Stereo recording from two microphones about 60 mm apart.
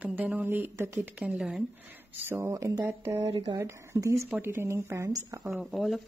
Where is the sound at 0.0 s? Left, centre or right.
Right.